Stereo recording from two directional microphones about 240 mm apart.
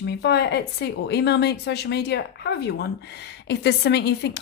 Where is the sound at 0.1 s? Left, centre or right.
Left.